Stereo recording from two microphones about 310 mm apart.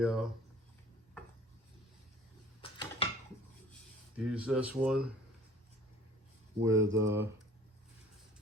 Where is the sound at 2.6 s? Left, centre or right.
Centre.